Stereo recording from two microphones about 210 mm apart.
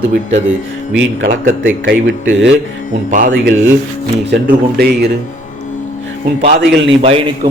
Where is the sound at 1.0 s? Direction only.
50° right (ahead or behind).